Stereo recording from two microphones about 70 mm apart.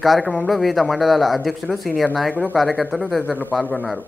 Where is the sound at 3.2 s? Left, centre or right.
Left.